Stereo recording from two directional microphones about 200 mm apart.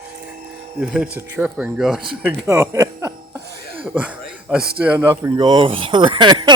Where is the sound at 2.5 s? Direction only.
15° right (ahead or behind).